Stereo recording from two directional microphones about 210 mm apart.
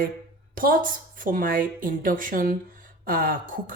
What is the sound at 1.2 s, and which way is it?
Speech, 40° right (ahead or behind).